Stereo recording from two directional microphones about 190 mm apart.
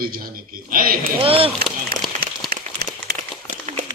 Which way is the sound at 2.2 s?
55° right (ahead or behind).